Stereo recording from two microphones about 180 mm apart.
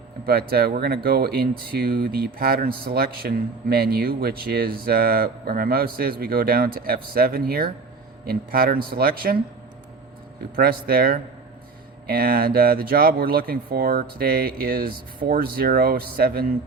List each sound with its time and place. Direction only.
0.3 s speech: 60° right (ahead or behind)
10.5 s speech: 60° right (ahead or behind)